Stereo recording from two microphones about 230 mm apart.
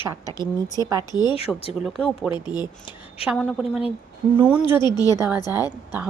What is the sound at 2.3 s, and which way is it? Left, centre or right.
Speech, centre.